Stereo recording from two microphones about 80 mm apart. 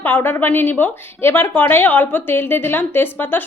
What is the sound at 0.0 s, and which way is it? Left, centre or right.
Speech, left.